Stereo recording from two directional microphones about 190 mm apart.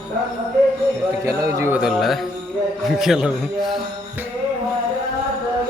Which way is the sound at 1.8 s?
Centre (ahead or behind).